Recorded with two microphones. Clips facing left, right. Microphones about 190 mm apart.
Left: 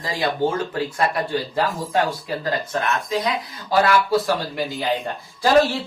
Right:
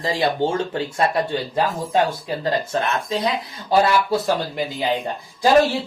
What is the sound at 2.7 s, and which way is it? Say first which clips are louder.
Speech: right 1 dB; 30° right (ahead or behind).